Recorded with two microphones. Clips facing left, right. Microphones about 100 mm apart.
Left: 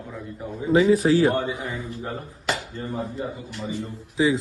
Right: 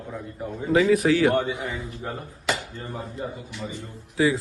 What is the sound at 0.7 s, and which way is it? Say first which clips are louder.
Speech: left 2 dB; 30° left (ahead or behind).